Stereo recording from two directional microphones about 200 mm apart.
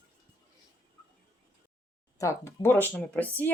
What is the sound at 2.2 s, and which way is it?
Speech, 15° left (ahead or behind).